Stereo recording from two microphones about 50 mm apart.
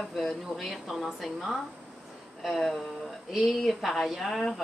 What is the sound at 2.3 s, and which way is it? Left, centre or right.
Speech, centre.